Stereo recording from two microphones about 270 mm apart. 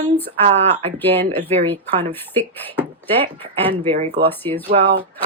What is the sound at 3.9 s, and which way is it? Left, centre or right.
Speech, right.